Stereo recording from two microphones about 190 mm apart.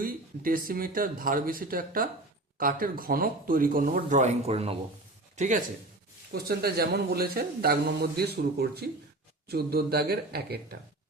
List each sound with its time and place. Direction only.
0.0 s speech: 50° right (ahead or behind)
6.3 s a man's voice: 55° right (ahead or behind)